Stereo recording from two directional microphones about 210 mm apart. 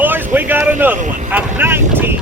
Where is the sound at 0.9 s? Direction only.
35° right (ahead or behind).